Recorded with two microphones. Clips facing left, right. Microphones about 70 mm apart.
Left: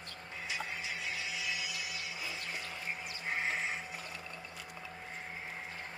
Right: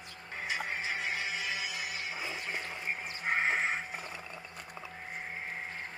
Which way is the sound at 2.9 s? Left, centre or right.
Right.